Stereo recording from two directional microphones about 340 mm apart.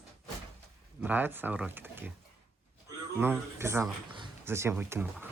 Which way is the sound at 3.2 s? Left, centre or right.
Centre.